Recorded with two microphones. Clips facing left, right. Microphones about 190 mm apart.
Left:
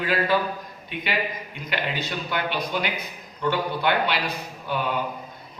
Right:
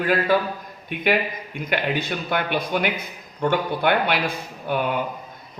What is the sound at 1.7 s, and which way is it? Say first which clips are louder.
A man's voice: right 4 dB; 55° right (ahead or behind).